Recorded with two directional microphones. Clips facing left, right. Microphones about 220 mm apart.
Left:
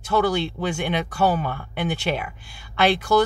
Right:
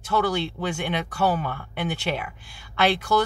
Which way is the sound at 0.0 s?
15° left (ahead or behind).